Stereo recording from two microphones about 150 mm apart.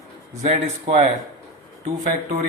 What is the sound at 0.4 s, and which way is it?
Speech, 45° right (ahead or behind).